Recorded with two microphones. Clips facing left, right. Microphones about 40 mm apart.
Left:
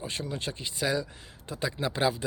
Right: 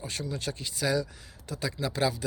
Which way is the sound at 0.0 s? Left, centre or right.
Left.